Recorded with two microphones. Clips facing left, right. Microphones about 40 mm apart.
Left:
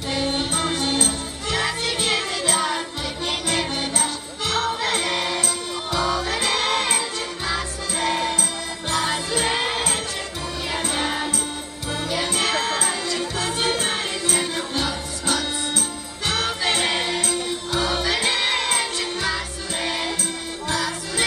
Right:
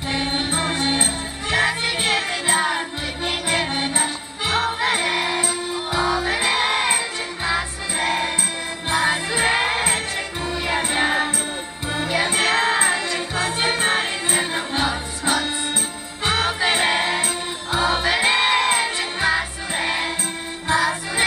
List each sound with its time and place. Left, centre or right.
0.1 s music: right